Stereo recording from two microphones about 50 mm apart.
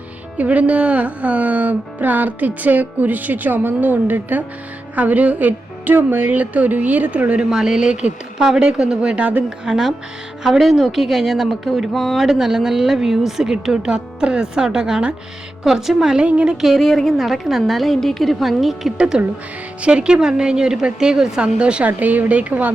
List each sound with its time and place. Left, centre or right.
0.3 s speech: right
7.5 s a woman's voice: centre
9.6 s a woman's voice: centre
16.2 s a woman's voice: centre
16.6 s a woman's voice: centre
16.8 s a woman's voice: centre
18.9 s a woman's voice: centre; by 22.7 s right